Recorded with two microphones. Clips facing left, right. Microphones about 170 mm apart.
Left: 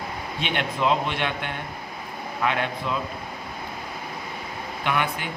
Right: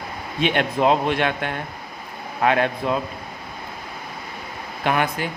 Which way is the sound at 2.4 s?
45° right (ahead or behind).